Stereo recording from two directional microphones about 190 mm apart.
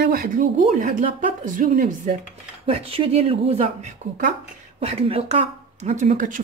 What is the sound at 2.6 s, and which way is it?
Speech, 30° right (ahead or behind).